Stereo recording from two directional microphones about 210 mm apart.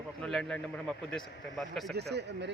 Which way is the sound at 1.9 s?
50° right (ahead or behind).